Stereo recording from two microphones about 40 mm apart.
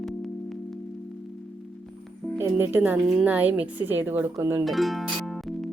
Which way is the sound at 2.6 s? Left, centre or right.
Right.